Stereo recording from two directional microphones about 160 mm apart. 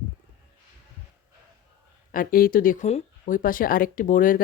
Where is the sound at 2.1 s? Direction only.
60° left (ahead or behind).